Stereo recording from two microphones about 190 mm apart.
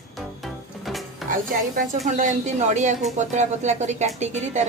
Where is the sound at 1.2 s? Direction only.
Centre (ahead or behind).